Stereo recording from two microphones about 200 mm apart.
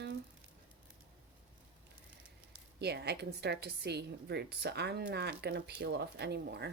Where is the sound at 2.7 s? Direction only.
55° right (ahead or behind).